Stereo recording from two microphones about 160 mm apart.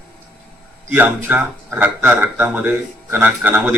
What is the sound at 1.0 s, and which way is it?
Speech, 10° right (ahead or behind).